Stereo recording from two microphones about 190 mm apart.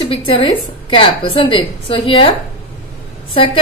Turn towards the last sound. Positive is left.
turn(degrees=30)  # may be behind; listen again after turning